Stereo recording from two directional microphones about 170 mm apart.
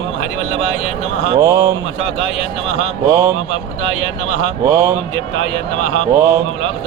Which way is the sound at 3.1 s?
10° right (ahead or behind).